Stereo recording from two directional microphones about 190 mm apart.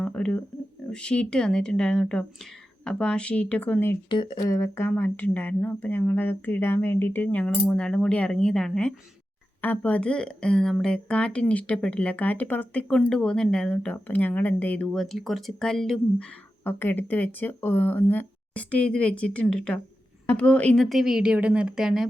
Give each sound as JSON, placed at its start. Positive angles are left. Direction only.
{"t": 0.0, "sound": "a sound", "side_deg": 5}
{"t": 0.9, "sound": "speech", "side_deg": 5}
{"t": 4.1, "sound": "speech", "side_deg": 25}